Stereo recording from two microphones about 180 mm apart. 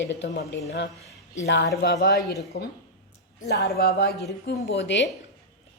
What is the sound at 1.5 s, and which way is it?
A woman's voice, 70° left (ahead or behind).